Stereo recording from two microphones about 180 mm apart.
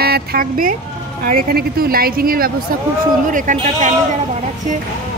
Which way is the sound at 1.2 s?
55° right (ahead or behind).